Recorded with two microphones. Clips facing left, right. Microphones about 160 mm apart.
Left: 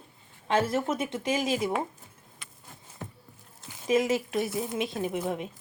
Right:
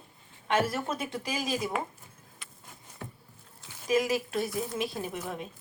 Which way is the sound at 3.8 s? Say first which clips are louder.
Left 2 dB; 25° left (ahead or behind).